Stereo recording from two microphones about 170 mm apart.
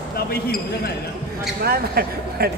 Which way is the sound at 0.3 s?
65° left (ahead or behind).